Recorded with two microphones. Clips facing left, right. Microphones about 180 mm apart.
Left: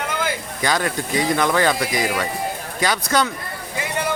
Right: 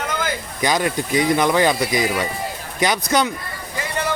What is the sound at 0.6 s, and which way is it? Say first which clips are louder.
Speech: right 2 dB; 15° right (ahead or behind).